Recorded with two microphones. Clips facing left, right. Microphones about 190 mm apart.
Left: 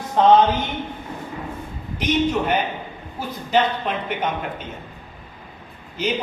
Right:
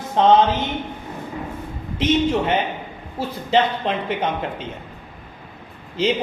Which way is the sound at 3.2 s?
30° right (ahead or behind).